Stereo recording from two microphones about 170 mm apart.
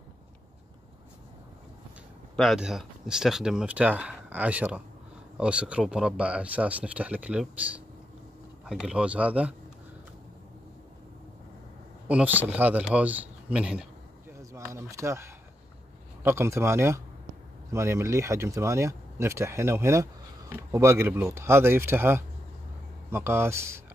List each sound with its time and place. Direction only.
2.3 s speech: centre (ahead or behind)
12.1 s speech: 10° right (ahead or behind)
14.3 s a sound: 15° right (ahead or behind)
16.2 s speech: 15° right (ahead or behind)